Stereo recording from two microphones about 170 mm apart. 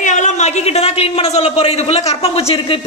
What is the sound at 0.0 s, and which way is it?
A man's voice, 45° left (ahead or behind).